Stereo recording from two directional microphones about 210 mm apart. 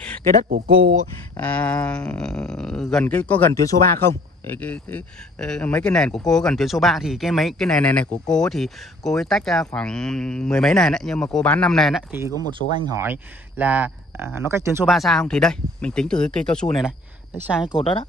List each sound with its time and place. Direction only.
0.5 s speech: 45° right (ahead or behind)
1.3 s speech: 5° left (ahead or behind)
12.7 s speech: 15° right (ahead or behind)
14.9 s speech: centre (ahead or behind)
17.7 s speech: 25° left (ahead or behind)